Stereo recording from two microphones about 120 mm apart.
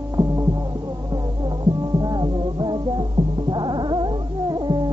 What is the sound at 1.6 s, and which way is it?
Music, 35° right (ahead or behind).